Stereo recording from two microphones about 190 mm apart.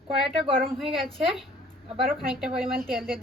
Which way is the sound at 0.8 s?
Centre (ahead or behind).